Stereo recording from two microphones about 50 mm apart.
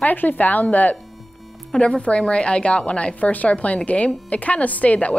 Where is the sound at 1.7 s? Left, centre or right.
Centre.